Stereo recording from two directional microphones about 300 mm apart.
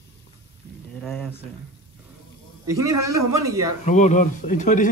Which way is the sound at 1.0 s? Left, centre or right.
Centre.